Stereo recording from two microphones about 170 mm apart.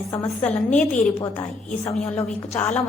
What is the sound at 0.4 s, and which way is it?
A woman's voice, 10° left (ahead or behind).